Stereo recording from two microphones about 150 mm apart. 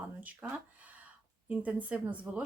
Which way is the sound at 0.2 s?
10° right (ahead or behind).